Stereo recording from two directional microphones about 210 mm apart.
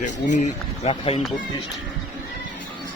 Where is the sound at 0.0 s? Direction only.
35° left (ahead or behind).